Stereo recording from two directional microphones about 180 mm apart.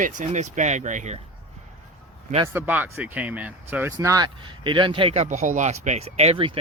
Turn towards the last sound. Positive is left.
turn(degrees=-30)  # may be behind; listen again after turning